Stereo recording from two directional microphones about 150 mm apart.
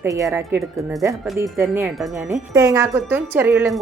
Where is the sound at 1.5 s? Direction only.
15° right (ahead or behind).